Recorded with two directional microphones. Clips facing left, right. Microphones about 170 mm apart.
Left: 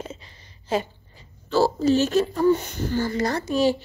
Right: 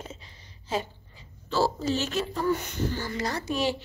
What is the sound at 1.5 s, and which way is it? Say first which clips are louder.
Speech: left 7 dB; 50° left (ahead or behind).